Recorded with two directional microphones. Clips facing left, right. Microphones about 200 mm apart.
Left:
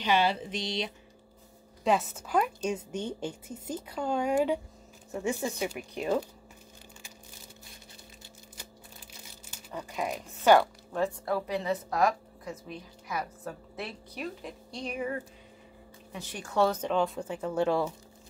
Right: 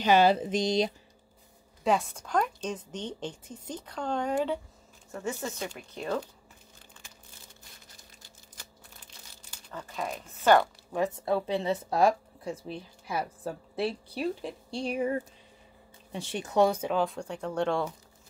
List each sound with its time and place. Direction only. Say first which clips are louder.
0.0 s speech: right 5 dB; 45° right (ahead or behind)
1.9 s a woman's voice: even; 5° left (ahead or behind)
9.4 s crumpling: left 2 dB; 10° left (ahead or behind)
11.0 s a woman's voice: right 2 dB; 25° right (ahead or behind); by 17.9 s 5° left (ahead or behind)